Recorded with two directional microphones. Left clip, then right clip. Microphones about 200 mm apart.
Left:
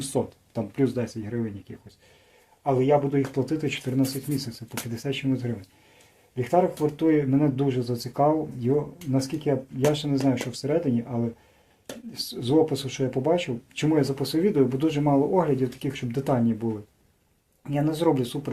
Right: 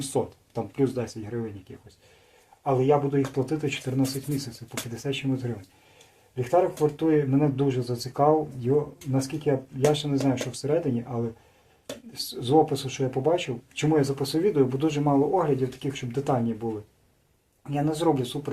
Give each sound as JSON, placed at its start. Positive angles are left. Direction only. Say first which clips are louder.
{"t": 0.0, "sound": "speech", "louder": "even", "side_deg": 35}
{"t": 2.6, "sound": "speech", "louder": "left 1 dB", "side_deg": 35}
{"t": 12.1, "sound": "speech", "louder": "right 1 dB", "side_deg": 35}
{"t": 17.7, "sound": "speech", "louder": "left 1 dB", "side_deg": 45}